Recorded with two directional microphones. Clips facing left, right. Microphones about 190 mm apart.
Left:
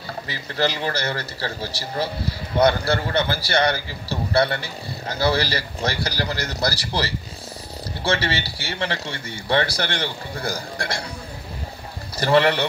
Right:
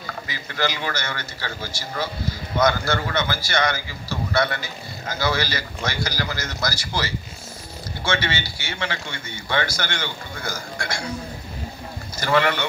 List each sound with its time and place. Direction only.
0.0 s a man's voice: 30° left (ahead or behind)
12.2 s a man's voice: 35° left (ahead or behind)